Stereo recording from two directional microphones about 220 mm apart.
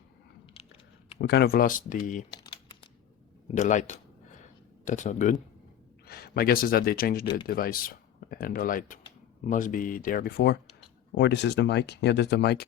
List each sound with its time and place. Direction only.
0.5 s a sound: 25° left (ahead or behind)
1.2 s speech: 50° left (ahead or behind)
2.3 s typing: 20° left (ahead or behind)
3.5 s speech: 35° left (ahead or behind)
6.1 s speech: 45° left (ahead or behind)